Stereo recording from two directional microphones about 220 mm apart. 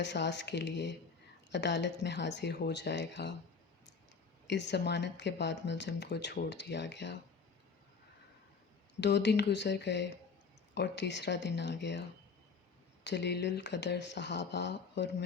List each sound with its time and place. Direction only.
0.0 s speech: 50° left (ahead or behind)
4.4 s speech: 50° left (ahead or behind)
9.0 s speech: 50° left (ahead or behind)
13.1 s speech: 50° left (ahead or behind)